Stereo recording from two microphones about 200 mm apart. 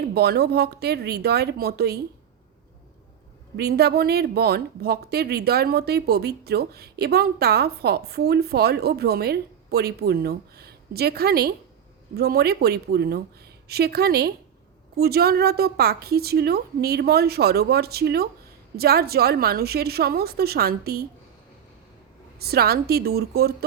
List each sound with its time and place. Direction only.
0.1 s speech: 55° right (ahead or behind)
3.6 s speech: 55° right (ahead or behind)
22.4 s speech: 50° right (ahead or behind)